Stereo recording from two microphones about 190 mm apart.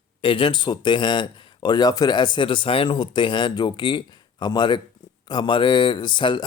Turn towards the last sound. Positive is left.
turn(degrees=25)  # may be behind; listen again after turning